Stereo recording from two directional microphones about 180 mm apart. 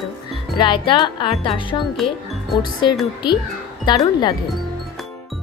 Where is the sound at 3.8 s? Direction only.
25° left (ahead or behind).